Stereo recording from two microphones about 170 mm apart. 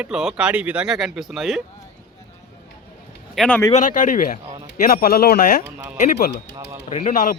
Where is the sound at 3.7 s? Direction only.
50° left (ahead or behind); by 5.4 s 65° left (ahead or behind).